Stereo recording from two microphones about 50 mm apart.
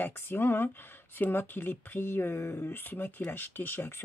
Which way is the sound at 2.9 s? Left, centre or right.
Left.